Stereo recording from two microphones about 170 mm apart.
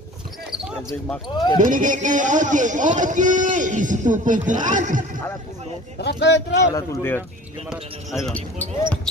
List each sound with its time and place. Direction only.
0.5 s basketball bounce: 5° right (ahead or behind)
1.3 s speech: 25° left (ahead or behind)
1.6 s a man's voice: 50° right (ahead or behind)
5.9 s speech: 85° left
6.7 s speech: 15° left (ahead or behind)
7.7 s speech: centre (ahead or behind)